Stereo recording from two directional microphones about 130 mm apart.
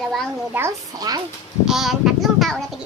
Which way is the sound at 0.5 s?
10° right (ahead or behind).